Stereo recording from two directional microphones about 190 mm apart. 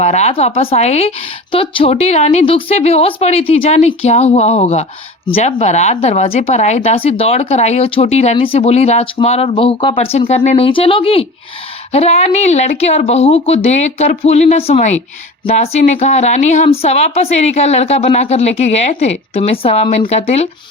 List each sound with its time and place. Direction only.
0.0 s speech: 35° left (ahead or behind)